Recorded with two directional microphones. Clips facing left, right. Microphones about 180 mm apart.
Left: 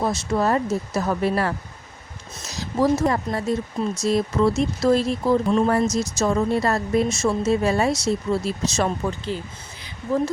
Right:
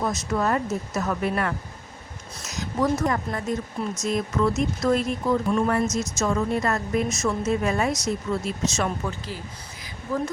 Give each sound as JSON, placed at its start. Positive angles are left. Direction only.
{"t": 0.0, "sound": "speech", "side_deg": 30}